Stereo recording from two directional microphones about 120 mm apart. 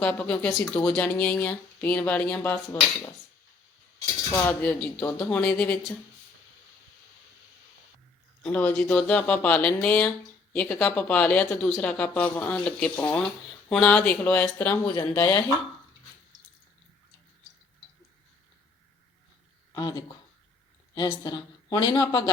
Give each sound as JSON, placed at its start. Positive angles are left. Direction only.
{"t": 0.0, "sound": "speech", "side_deg": 10}
{"t": 4.4, "sound": "speech", "side_deg": 15}
{"t": 8.4, "sound": "speech", "side_deg": 10}
{"t": 15.2, "sound": "speech", "side_deg": 25}
{"t": 19.7, "sound": "a woman's voice", "side_deg": 30}